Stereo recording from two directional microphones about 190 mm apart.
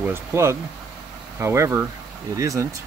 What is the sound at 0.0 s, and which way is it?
Speech, 15° right (ahead or behind).